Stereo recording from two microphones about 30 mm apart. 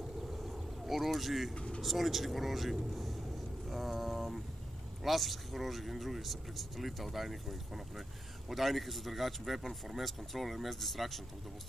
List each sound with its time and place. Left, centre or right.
0.3 s vehicle: centre
1.5 s speech: left
1.8 s speech: centre
3.6 s mantra: centre
5.0 s speech: centre
8.5 s speech: centre